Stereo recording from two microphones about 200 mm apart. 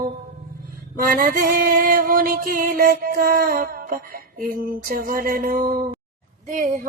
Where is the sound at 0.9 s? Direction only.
45° right (ahead or behind).